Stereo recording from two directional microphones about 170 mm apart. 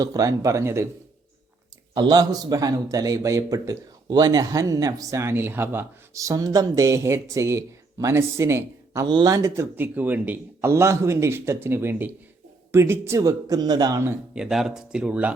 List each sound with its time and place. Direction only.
0.0 s speech: 20° right (ahead or behind)
1.9 s a man's voice: 25° right (ahead or behind); by 15.3 s 5° right (ahead or behind)